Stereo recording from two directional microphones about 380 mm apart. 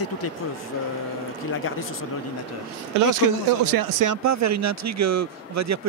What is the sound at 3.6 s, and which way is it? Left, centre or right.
Speech, right.